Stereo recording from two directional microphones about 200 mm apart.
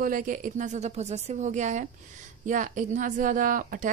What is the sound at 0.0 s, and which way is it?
A woman's voice, 45° right (ahead or behind).